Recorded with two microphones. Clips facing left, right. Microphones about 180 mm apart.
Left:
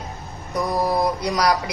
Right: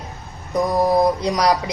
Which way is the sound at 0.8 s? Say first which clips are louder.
Right 5 dB; 20° right (ahead or behind).